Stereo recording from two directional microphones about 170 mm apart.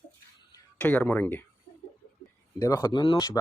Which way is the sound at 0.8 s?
10° left (ahead or behind).